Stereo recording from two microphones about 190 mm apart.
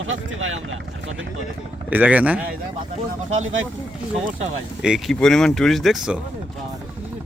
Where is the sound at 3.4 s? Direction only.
90° right.